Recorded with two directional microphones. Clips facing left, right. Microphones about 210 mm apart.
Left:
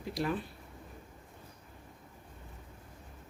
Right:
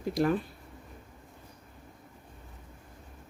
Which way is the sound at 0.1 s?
50° right (ahead or behind).